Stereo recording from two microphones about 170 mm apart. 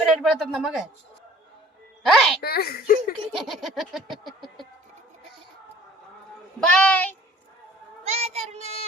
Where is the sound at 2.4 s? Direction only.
65° left (ahead or behind).